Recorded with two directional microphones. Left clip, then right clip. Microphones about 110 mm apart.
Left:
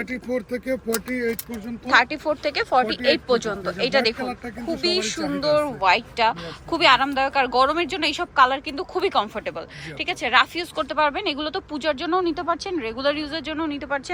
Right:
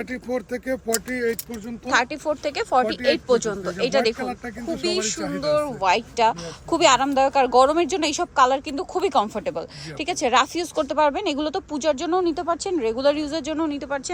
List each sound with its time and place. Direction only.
0.3 s speech: 10° left (ahead or behind)
1.9 s speech: 30° right (ahead or behind)